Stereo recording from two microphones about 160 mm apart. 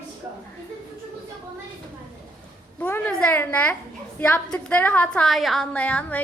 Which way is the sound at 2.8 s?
10° left (ahead or behind).